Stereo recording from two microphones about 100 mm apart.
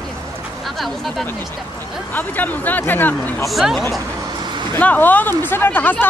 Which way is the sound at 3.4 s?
Centre (ahead or behind).